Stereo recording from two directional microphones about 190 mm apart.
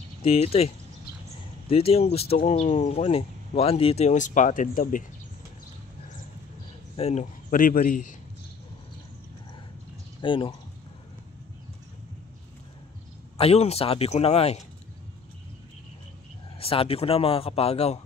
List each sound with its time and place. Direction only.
0.2 s speech: 30° left (ahead or behind)
1.7 s speech: 30° left (ahead or behind)
7.0 s speech: 35° left (ahead or behind)
7.5 s a man's voice: 45° left (ahead or behind)
10.2 s speech: 25° left (ahead or behind)
13.4 s speech: 35° left (ahead or behind)
16.5 s speech: 30° left (ahead or behind)